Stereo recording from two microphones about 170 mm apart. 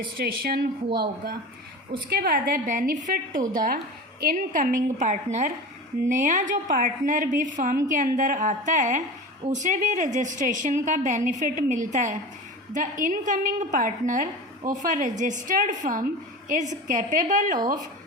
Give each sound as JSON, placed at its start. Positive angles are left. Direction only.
{"t": 0.2, "sound": "a woman's voice", "side_deg": -65}